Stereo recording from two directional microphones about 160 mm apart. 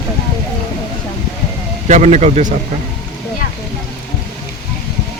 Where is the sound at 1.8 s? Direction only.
45° right (ahead or behind).